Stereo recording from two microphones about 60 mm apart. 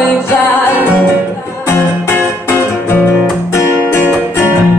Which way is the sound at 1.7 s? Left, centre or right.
Left.